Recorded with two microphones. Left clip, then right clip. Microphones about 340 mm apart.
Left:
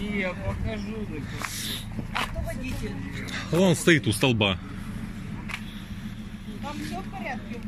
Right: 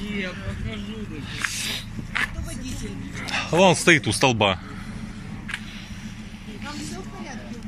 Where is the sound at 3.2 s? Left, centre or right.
Centre.